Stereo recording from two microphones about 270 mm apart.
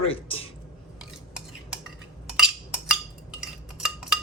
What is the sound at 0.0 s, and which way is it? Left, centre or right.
Speech, left.